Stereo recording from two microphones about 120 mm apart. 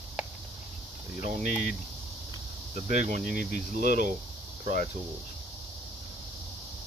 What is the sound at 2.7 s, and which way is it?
Speech, 90° right.